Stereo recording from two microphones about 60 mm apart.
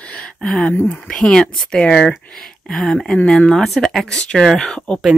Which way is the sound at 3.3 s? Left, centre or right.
Centre.